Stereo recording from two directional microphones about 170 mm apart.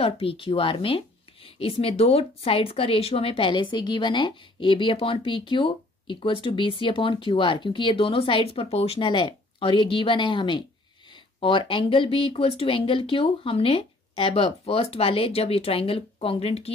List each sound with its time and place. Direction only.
0.0 s speech: 35° left (ahead or behind)